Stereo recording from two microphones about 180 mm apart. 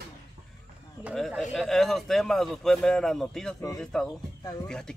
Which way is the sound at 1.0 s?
5° right (ahead or behind).